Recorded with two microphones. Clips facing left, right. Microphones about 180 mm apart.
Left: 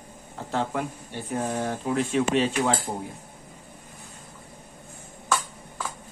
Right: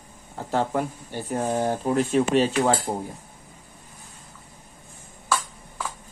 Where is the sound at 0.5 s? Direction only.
40° right (ahead or behind).